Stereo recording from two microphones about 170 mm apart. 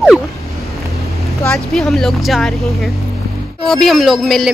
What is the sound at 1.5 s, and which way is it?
Speech, 5° left (ahead or behind).